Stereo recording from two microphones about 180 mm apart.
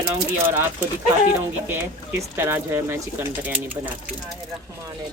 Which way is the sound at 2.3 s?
10° right (ahead or behind).